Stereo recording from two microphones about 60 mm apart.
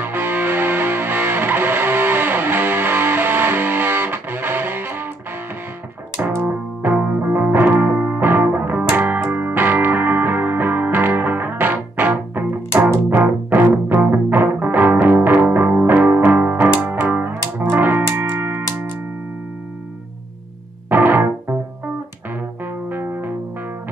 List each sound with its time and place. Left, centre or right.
0.0 s music: right
6.8 s music: right
20.9 s music: right